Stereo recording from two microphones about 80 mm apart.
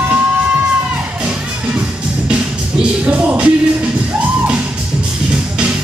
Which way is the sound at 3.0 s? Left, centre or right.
Centre.